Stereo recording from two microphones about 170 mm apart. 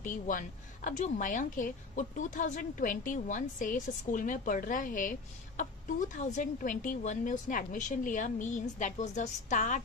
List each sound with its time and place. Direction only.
0.0 s a woman's voice: 50° left (ahead or behind)
6.1 s a woman's voice: 45° left (ahead or behind)